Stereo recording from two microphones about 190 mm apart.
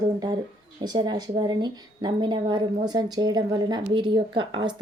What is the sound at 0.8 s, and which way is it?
Speech, 20° right (ahead or behind).